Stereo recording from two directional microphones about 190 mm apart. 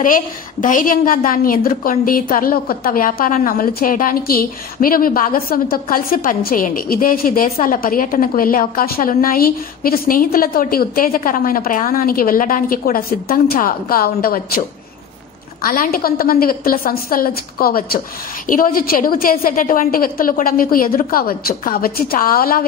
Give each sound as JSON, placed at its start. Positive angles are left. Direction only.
{"t": 0.0, "sound": "a woman's voice", "side_deg": 45}
{"t": 15.6, "sound": "a woman's voice", "side_deg": 50}